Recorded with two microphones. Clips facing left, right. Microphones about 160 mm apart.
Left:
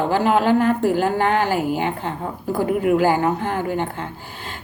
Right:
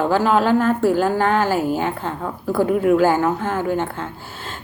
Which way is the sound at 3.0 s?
15° left (ahead or behind).